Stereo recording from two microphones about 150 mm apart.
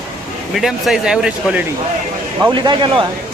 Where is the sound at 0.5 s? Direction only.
Centre (ahead or behind).